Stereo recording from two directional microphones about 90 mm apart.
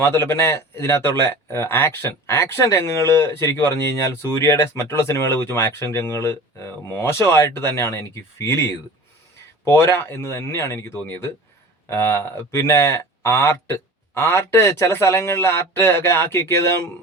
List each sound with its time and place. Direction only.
0.0 s speech: 25° left (ahead or behind)